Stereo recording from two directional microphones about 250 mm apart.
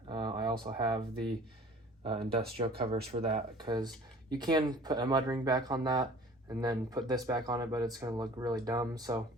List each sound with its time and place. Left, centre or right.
0.1 s a sound: centre
0.6 s speech: centre
2.1 s speech: right
3.1 s speech: right